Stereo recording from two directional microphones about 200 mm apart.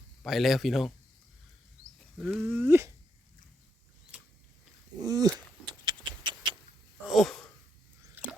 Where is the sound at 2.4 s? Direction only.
10° right (ahead or behind).